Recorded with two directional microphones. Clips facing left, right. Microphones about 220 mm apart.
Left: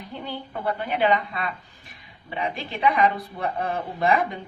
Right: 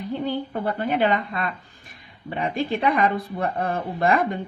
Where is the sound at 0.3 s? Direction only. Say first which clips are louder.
Left 1 dB; 45° right (ahead or behind).